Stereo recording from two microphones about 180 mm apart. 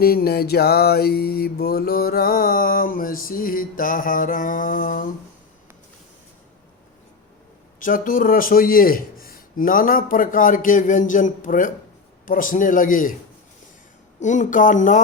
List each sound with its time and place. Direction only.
0.0 s mantra: 60° left (ahead or behind)
7.8 s mantra: 50° left (ahead or behind)
14.2 s mantra: 45° left (ahead or behind)